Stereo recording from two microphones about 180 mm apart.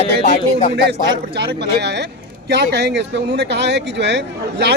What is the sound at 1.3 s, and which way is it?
Speech, 65° right (ahead or behind).